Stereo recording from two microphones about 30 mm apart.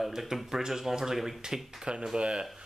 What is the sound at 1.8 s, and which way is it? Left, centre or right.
Speech, right.